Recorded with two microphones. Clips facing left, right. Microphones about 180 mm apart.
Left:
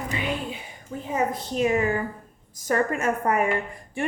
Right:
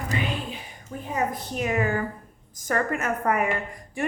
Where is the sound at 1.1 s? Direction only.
25° left (ahead or behind).